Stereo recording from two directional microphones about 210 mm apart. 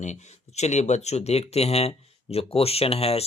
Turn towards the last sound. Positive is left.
turn(degrees=30)  # may be behind; listen again after turning